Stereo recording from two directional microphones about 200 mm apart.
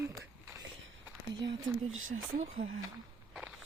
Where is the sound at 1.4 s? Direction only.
85° right.